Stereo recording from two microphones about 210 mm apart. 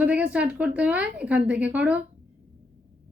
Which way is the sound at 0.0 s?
5° right (ahead or behind).